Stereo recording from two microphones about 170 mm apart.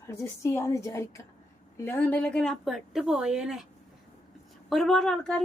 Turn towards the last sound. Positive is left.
turn(degrees=5)  # may be behind; listen again after turning